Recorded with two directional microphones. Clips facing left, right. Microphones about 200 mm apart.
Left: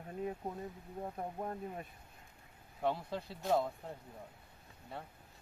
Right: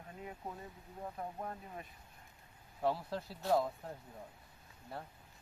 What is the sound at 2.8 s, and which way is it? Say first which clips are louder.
Speech: even; 5° right (ahead or behind).